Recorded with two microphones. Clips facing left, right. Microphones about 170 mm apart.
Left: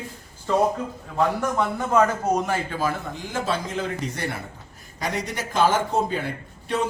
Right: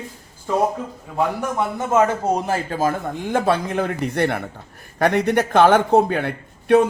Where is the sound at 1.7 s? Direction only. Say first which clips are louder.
Right 4 dB; 20° right (ahead or behind); by 6.8 s 60° right (ahead or behind).